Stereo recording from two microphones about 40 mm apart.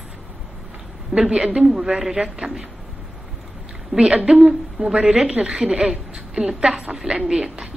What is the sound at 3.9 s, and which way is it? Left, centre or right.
A woman's voice, right.